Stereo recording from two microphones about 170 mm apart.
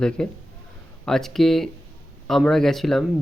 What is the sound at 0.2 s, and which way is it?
Speech, 5° left (ahead or behind).